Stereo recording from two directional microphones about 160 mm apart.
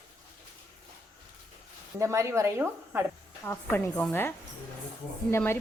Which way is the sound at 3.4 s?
15° left (ahead or behind).